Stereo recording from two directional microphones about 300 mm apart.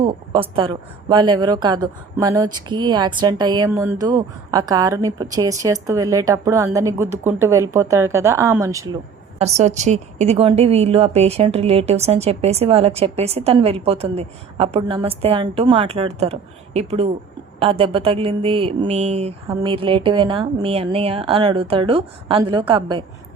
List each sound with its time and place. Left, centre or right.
0.0 s speech: centre
9.4 s a woman's voice: right